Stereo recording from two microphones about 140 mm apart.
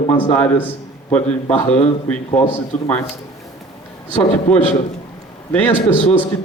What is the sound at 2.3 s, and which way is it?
Speech, 55° left (ahead or behind).